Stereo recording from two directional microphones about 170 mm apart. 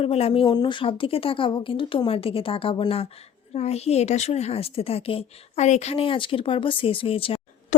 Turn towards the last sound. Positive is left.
turn(degrees=35)  # may be behind; listen again after turning